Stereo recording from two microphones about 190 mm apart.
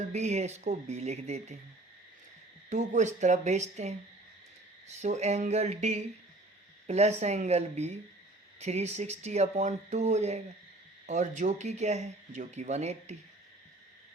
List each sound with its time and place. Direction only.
0.1 s speech: 35° right (ahead or behind)
2.6 s speech: 40° right (ahead or behind)